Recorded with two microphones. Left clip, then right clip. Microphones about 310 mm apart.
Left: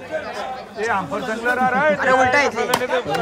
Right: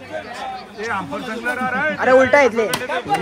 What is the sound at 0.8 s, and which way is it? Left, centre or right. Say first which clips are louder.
A man's voice: left 3 dB; left.